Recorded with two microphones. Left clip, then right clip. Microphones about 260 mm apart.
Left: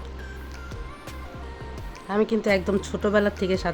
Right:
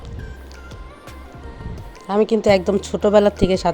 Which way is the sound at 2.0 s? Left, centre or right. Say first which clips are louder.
Right 7 dB; centre.